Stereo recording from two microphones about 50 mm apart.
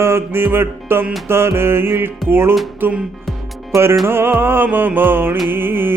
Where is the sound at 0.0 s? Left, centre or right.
Right.